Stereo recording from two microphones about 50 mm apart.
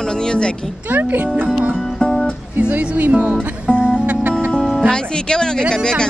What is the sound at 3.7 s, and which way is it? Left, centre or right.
Music, left.